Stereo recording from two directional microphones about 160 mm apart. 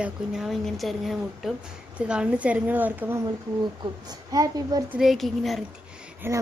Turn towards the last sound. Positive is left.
turn(degrees=-15)  # may be behind; listen again after turning